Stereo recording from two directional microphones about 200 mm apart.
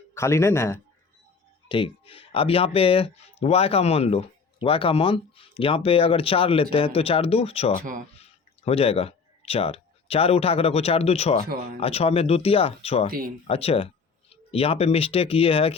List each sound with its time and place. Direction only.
0.1 s speech: 15° left (ahead or behind)
1.6 s speech: 25° left (ahead or behind)
7.8 s speech: 45° right (ahead or behind)
8.1 s speech: 30° left (ahead or behind)
11.4 s speech: 45° right (ahead or behind)
11.8 s speech: 30° left (ahead or behind)
13.1 s speech: 45° right (ahead or behind)
13.5 s speech: 30° left (ahead or behind)